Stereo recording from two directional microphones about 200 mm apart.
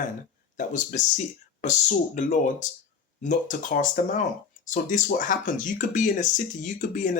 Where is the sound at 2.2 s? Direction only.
40° left (ahead or behind).